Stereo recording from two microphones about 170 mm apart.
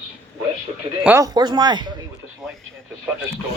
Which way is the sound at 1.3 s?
25° right (ahead or behind).